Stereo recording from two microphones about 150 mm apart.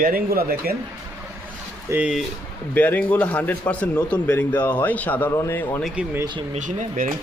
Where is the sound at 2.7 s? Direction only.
10° left (ahead or behind).